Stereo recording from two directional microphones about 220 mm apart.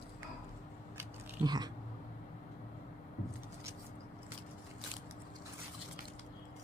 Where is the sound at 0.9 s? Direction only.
20° right (ahead or behind).